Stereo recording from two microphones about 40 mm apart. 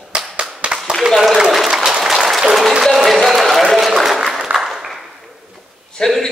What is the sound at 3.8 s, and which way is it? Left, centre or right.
Applause, centre.